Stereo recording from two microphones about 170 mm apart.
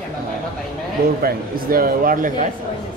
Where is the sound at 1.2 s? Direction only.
60° right (ahead or behind).